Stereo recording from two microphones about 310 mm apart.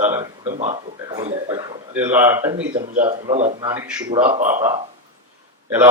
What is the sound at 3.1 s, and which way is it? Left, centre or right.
A man's voice, right.